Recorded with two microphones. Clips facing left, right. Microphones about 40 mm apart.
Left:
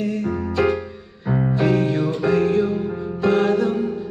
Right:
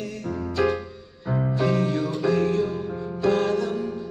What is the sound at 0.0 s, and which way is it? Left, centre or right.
Music, left.